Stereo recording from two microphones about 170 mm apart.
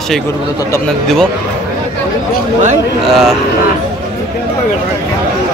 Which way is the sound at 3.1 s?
Centre (ahead or behind).